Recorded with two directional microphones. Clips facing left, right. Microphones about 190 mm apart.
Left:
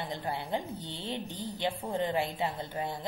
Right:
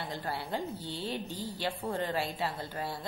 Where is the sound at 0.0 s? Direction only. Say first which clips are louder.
Left 1 dB; 20° left (ahead or behind).